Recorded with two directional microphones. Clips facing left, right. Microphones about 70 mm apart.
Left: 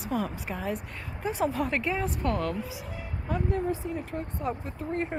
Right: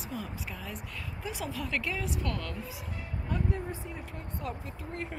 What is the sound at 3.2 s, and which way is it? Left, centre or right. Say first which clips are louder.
Speech: left 4 dB; left.